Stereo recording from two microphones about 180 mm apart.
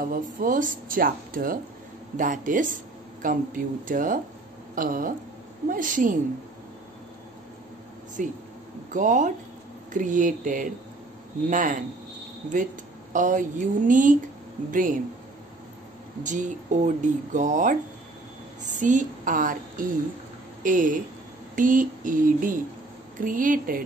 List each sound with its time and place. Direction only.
0.0 s speech: 50° right (ahead or behind)
8.2 s speech: 45° right (ahead or behind)
13.1 s speech: 45° right (ahead or behind)
16.2 s speech: 45° right (ahead or behind)
18.8 s speech: 45° right (ahead or behind)